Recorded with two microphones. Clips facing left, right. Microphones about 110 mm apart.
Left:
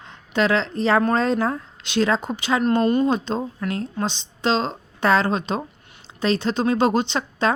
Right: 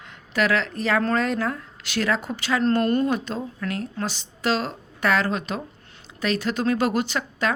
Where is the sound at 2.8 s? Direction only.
5° left (ahead or behind).